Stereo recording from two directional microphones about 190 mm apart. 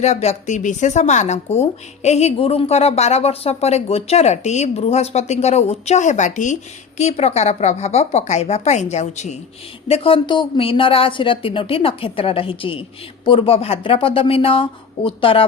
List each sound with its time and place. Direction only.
0.0 s a woman's voice: 35° left (ahead or behind)